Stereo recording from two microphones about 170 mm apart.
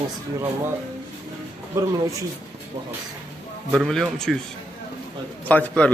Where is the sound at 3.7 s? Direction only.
Centre (ahead or behind).